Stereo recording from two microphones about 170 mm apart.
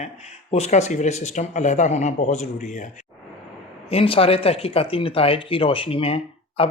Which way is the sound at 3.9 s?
35° left (ahead or behind).